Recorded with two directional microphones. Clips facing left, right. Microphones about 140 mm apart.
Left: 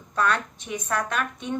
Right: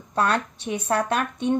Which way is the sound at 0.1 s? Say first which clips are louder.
Right 2 dB; 35° right (ahead or behind).